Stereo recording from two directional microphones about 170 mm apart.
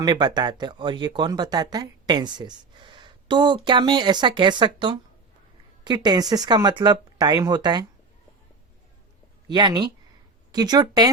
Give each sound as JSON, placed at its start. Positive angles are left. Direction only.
{"t": 0.0, "sound": "speech", "side_deg": -25}
{"t": 9.5, "sound": "speech", "side_deg": -25}